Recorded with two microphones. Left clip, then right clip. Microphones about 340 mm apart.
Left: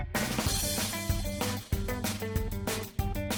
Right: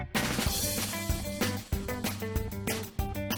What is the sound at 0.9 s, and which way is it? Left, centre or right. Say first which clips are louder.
Music: right 1 dB; centre.